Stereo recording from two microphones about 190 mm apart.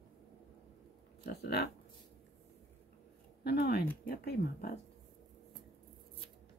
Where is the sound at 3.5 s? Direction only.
55° left (ahead or behind).